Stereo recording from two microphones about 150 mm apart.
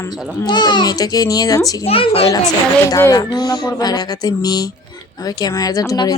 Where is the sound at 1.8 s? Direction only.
40° left (ahead or behind).